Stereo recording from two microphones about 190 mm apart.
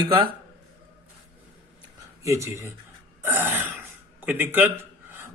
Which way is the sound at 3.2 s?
10° right (ahead or behind).